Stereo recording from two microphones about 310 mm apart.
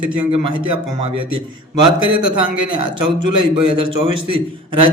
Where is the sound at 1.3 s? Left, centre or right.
Centre.